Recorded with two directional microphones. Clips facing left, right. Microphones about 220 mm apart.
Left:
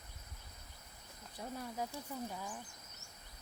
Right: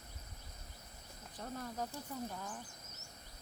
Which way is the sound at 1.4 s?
10° left (ahead or behind).